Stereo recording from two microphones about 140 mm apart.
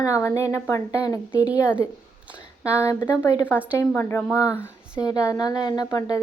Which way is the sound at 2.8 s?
20° left (ahead or behind).